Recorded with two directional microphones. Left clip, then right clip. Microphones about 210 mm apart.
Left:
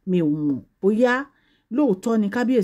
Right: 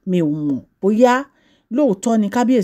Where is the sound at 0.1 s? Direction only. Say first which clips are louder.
Right 3 dB; 25° right (ahead or behind).